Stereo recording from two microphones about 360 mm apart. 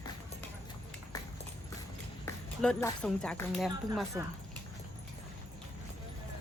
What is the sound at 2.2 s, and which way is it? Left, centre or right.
A woman's voice, centre.